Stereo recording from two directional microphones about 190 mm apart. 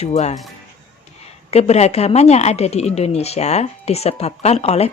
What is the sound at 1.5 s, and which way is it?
A woman's voice, 35° left (ahead or behind).